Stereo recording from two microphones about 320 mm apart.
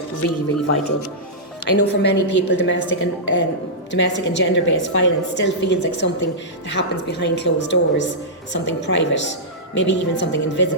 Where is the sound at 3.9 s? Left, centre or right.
Left.